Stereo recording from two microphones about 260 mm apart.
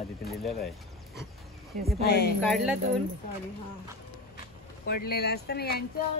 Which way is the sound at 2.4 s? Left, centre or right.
Centre.